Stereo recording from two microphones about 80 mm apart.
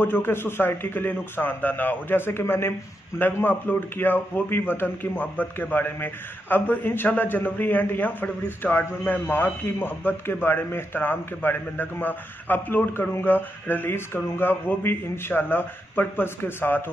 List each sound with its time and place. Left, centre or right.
0.0 s a man's voice: left